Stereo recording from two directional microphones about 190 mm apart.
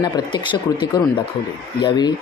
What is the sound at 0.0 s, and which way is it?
Speech, 25° left (ahead or behind).